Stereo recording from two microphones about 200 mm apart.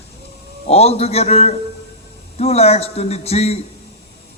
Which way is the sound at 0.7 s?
30° left (ahead or behind).